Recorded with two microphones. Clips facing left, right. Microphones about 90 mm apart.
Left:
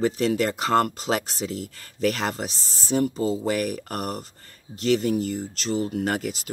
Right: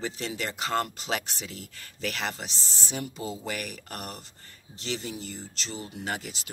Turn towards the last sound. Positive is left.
turn(degrees=45)  # may be behind; listen again after turning